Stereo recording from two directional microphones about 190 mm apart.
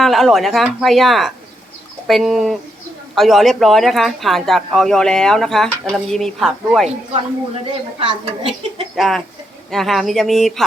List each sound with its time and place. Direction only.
0.0 s speech: centre (ahead or behind)
7.5 s a woman's voice: 30° right (ahead or behind)
9.0 s speech: centre (ahead or behind)